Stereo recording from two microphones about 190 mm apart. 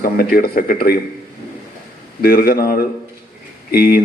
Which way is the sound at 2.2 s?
50° left (ahead or behind).